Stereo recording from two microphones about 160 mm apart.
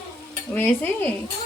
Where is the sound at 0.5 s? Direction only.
10° left (ahead or behind).